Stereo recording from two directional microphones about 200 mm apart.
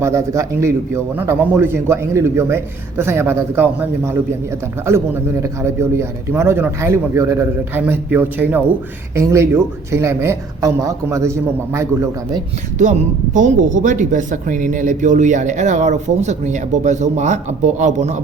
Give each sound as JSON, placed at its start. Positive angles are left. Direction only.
{"t": 0.0, "sound": "a man's voice", "side_deg": -15}
{"t": 12.8, "sound": "speech", "side_deg": -40}